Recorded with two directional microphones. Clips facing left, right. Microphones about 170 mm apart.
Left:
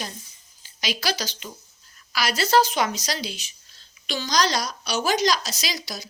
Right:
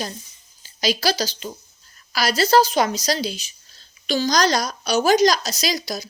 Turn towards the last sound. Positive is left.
turn(degrees=-40)  # may be behind; listen again after turning